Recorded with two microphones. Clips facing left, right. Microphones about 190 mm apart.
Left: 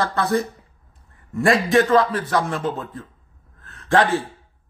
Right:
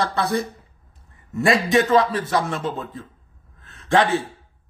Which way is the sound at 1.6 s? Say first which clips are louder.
Left 1 dB; 20° right (ahead or behind).